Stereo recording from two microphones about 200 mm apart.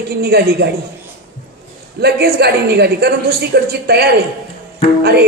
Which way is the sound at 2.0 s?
50° right (ahead or behind).